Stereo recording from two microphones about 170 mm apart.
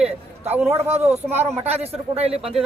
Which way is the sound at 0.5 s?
10° right (ahead or behind).